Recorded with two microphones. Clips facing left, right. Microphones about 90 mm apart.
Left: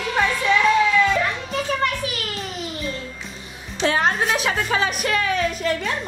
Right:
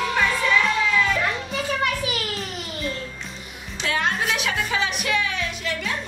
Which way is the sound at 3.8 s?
35° left (ahead or behind).